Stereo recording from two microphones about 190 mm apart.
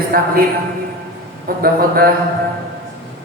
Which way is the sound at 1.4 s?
50° right (ahead or behind).